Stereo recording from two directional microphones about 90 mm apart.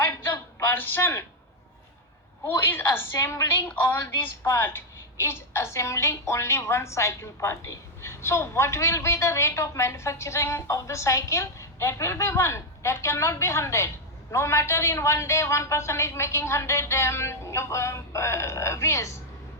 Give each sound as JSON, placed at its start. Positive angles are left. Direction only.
{"t": 0.6, "sound": "speech", "side_deg": 25}
{"t": 2.4, "sound": "a woman's voice", "side_deg": 25}
{"t": 3.7, "sound": "a woman's voice", "side_deg": 25}